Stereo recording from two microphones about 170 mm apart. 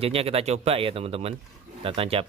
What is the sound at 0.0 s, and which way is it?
Speech, 35° right (ahead or behind).